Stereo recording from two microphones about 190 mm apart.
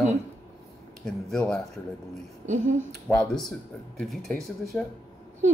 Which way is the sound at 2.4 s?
40° right (ahead or behind).